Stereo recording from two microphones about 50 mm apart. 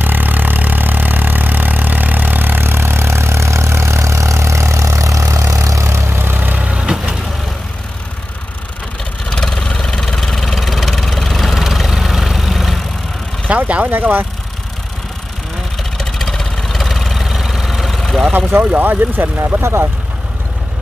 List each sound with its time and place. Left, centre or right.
0.0 s vehicle: right
6.6 s vehicle: centre
9.3 s engine: centre
13.5 s speech: right
16.0 s vehicle: centre
18.3 s speech: right